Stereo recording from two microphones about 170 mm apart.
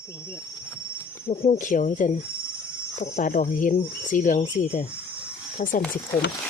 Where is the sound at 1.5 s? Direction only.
50° left (ahead or behind).